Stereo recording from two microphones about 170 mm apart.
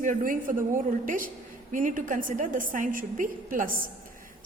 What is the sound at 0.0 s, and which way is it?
A woman's voice, 50° right (ahead or behind).